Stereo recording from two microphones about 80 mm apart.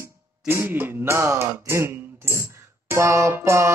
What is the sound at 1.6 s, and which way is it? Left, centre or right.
Cough, right.